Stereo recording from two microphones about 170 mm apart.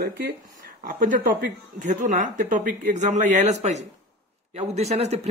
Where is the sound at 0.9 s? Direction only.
50° right (ahead or behind).